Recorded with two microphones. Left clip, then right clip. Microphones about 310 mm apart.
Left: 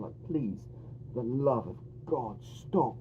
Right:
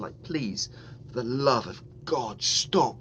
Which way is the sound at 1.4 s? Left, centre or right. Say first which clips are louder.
Right 5 dB; right.